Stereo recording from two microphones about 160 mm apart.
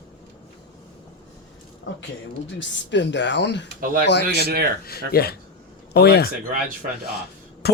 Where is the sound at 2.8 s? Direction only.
90° left.